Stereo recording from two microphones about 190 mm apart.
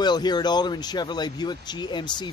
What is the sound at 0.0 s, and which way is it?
Speech, 20° left (ahead or behind).